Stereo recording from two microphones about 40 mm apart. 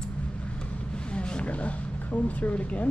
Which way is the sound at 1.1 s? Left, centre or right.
Left.